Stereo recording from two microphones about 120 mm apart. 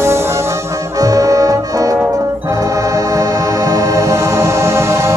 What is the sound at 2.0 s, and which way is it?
Music, 20° right (ahead or behind).